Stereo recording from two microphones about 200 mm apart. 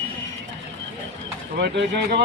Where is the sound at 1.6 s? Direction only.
60° right (ahead or behind).